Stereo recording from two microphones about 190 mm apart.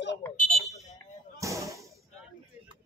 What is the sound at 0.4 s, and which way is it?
Fire alarm, 40° left (ahead or behind).